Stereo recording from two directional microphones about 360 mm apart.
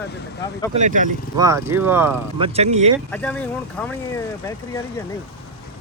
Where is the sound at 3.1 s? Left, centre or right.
Centre.